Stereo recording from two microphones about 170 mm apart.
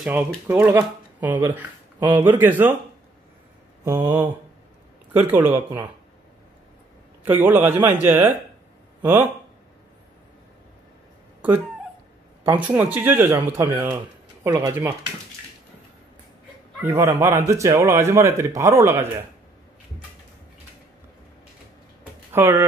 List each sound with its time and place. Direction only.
0.0 s speech: 10° right (ahead or behind)
3.8 s speech: 15° right (ahead or behind)
7.2 s speech: 10° right (ahead or behind)
12.5 s speech: 10° right (ahead or behind)
16.8 s speech: 15° right (ahead or behind)
22.3 s speech: 15° right (ahead or behind)